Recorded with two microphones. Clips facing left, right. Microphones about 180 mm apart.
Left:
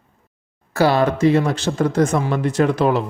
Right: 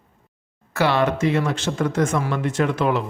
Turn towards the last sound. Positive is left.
turn(degrees=35)  # may be behind; listen again after turning